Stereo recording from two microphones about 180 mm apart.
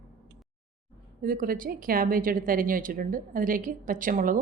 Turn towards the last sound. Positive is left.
turn(degrees=-50)  # may be behind; listen again after turning